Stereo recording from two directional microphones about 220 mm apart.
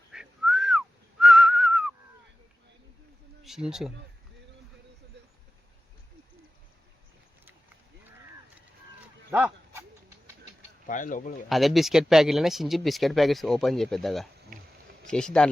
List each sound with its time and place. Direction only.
0.1 s whistling: centre (ahead or behind)
3.4 s speech: centre (ahead or behind)
9.3 s a sound: 10° right (ahead or behind)
10.8 s speech: 35° left (ahead or behind)
11.4 s speech: centre (ahead or behind)